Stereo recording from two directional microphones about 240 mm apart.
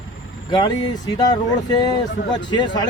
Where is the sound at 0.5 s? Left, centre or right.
Centre.